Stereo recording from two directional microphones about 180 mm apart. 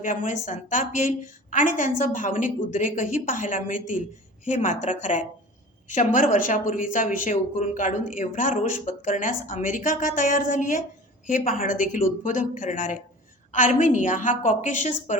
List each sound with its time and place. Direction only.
0.0 s a woman's voice: 45° left (ahead or behind)